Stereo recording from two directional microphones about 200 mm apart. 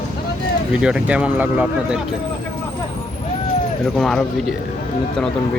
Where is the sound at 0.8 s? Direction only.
5° right (ahead or behind).